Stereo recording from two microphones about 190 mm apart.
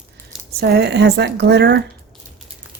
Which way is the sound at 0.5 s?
55° right (ahead or behind).